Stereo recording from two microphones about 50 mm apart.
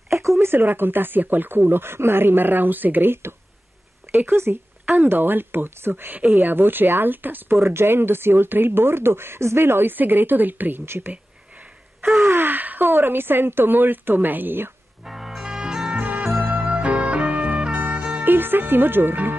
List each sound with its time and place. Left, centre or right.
0.4 s speech: right
6.1 s speech: right
7.6 s speech: right
12.4 s speech: right
15.0 s music: centre
16.0 s music: right
18.2 s speech: right